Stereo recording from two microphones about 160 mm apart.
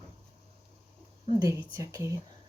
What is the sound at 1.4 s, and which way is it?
Speech, 20° right (ahead or behind).